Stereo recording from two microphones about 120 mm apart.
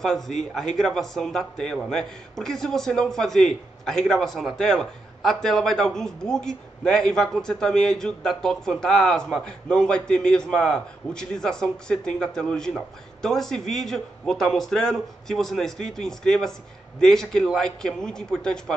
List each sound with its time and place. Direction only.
0.0 s a man's voice: 5° left (ahead or behind)